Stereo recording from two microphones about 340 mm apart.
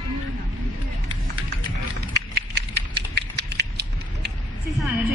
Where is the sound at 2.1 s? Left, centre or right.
Right.